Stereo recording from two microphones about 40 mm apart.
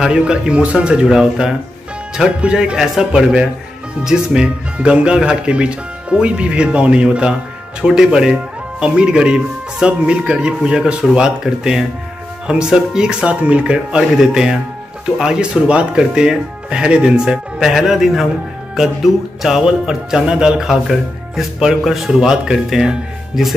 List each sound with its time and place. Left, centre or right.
0.2 s speech: right
1.0 s speech: centre; by 14.0 s right
14.1 s speech: centre
19.4 s speech: centre
20.6 s speech: centre